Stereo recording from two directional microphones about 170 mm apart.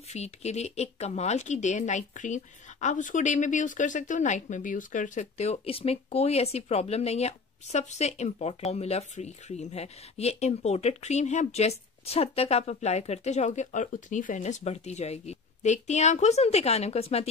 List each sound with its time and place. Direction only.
0.1 s speech: 40° left (ahead or behind)